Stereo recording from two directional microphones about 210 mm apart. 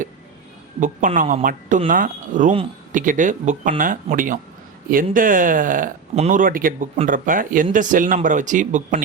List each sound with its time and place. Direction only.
0.8 s speech: 40° right (ahead or behind)